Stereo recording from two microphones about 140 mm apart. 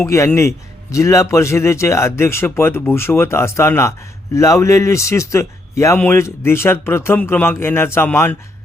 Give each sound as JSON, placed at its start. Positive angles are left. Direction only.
{"t": 0.0, "sound": "a man's voice", "side_deg": 20}